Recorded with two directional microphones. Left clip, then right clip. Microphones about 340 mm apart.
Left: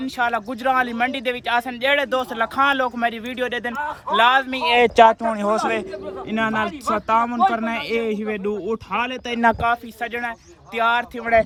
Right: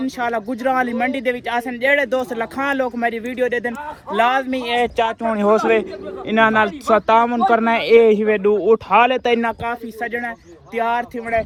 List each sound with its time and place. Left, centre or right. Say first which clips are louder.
0.0 s speech: even; centre
4.8 s speech: left 7 dB; left
5.3 s speech: right 5 dB; centre